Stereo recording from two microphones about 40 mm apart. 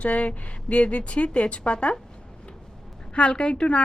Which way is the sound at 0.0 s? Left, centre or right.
Left.